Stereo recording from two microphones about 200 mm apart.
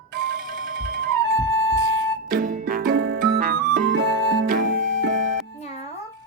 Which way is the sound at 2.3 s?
45° right (ahead or behind).